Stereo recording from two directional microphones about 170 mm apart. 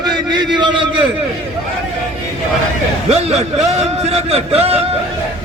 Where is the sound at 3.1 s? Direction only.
40° right (ahead or behind).